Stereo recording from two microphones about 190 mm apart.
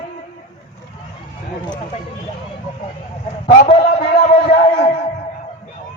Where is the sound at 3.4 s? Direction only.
35° left (ahead or behind).